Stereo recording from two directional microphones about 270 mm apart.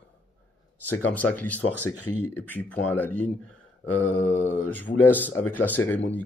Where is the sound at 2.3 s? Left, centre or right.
Centre.